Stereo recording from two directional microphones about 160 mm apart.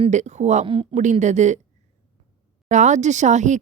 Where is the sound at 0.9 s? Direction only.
50° right (ahead or behind).